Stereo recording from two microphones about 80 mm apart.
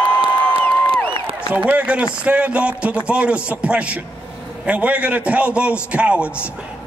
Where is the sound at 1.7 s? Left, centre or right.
Centre.